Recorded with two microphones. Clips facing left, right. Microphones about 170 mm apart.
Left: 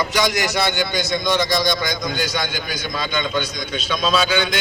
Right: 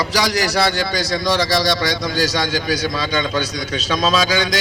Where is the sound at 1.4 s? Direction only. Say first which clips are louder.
Right 2 dB; 75° right (ahead or behind).